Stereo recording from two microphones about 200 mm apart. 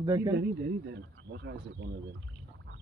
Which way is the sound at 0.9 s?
55° right (ahead or behind).